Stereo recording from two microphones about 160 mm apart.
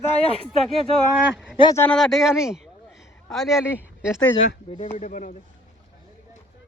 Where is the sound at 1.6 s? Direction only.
35° left (ahead or behind).